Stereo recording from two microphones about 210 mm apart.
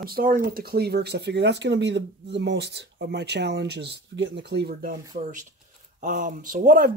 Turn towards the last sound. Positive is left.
turn(degrees=-40)  # may be behind; listen again after turning